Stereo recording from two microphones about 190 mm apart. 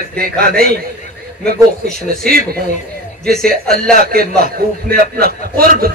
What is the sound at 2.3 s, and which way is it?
A man's voice, 50° right (ahead or behind).